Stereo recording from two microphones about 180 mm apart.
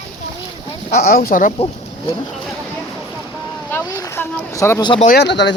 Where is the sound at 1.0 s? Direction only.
55° left (ahead or behind).